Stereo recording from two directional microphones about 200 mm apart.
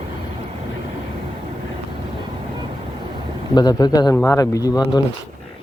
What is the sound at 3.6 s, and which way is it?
A man's voice, 20° left (ahead or behind).